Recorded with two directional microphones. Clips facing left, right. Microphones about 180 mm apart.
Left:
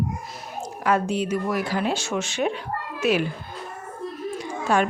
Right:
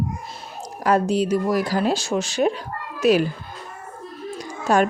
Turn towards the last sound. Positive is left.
turn(degrees=-40)  # may be behind; listen again after turning